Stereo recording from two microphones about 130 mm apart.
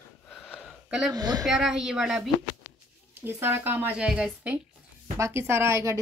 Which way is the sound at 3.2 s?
15° right (ahead or behind).